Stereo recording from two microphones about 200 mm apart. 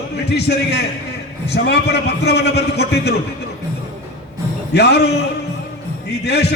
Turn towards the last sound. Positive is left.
turn(degrees=55)  # may be behind; listen again after turning